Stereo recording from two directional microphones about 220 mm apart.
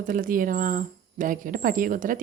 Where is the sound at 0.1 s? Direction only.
40° right (ahead or behind).